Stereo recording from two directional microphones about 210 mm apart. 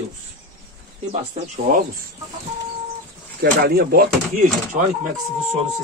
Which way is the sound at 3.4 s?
50° right (ahead or behind).